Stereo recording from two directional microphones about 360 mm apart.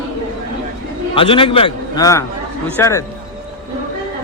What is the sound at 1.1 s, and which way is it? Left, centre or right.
A man's voice, centre.